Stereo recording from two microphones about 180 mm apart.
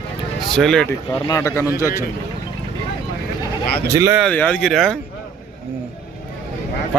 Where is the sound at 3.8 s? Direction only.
20° right (ahead or behind).